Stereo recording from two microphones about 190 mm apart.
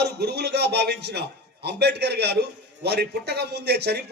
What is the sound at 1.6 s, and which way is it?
Speech, 60° right (ahead or behind).